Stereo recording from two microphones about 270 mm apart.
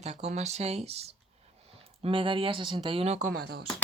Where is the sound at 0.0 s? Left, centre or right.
Right.